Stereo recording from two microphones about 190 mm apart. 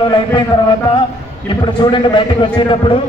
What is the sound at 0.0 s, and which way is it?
Speech, 25° left (ahead or behind).